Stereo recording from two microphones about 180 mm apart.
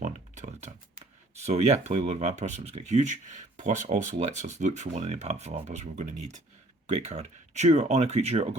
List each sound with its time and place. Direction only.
0.0 s speech: 40° right (ahead or behind)